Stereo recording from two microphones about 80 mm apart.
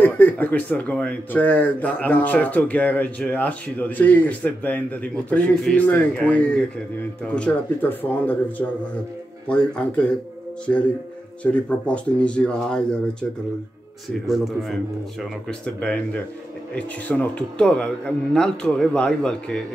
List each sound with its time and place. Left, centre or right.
0.0 s a man's voice: left
14.2 s a man's voice: centre
15.6 s speech: centre